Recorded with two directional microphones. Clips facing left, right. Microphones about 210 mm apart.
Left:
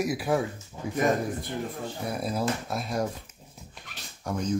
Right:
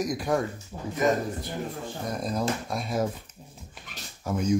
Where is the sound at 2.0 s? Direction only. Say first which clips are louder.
Even; 10° left (ahead or behind).